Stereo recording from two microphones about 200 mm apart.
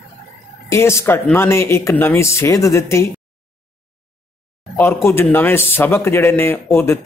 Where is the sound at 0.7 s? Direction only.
15° left (ahead or behind).